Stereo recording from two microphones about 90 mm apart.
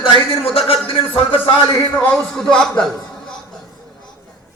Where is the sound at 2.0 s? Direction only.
10° left (ahead or behind).